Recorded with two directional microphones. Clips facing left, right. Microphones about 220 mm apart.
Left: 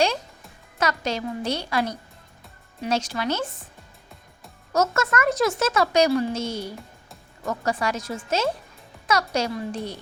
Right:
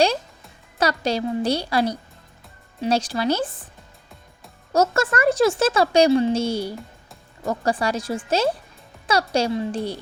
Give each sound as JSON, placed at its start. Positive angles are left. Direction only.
{"t": 0.8, "sound": "speech", "side_deg": -35}
{"t": 4.7, "sound": "speech", "side_deg": -30}